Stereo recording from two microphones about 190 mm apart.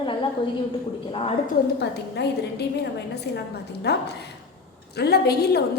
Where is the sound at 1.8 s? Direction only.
60° left (ahead or behind).